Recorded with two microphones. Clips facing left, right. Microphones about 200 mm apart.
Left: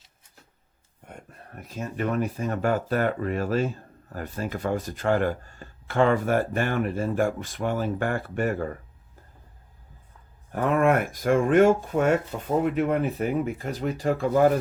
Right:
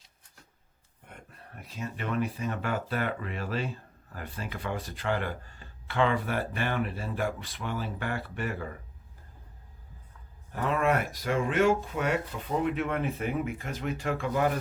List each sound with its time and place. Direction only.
1.0 s speech: 45° left (ahead or behind)
10.5 s speech: 50° left (ahead or behind)